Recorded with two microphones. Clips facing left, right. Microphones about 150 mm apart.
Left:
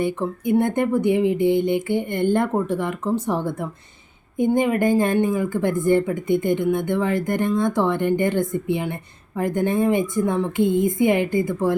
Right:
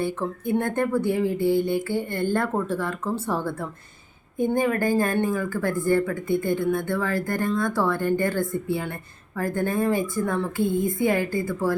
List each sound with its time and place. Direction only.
0.0 s speech: 15° left (ahead or behind)